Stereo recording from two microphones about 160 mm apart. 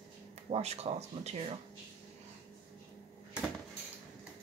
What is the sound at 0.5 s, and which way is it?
Speech, 40° right (ahead or behind).